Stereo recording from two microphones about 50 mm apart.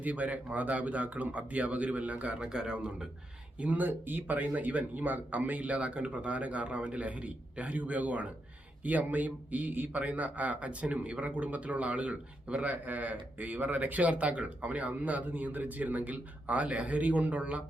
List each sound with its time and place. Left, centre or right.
0.0 s speech: right; by 3.1 s centre
3.6 s speech: right